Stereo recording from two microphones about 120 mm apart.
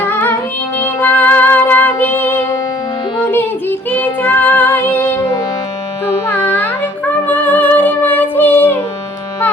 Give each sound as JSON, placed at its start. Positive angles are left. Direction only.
{"t": 0.0, "sound": "music", "side_deg": 15}
{"t": 0.8, "sound": "female singing", "side_deg": 20}
{"t": 3.2, "sound": "music", "side_deg": 15}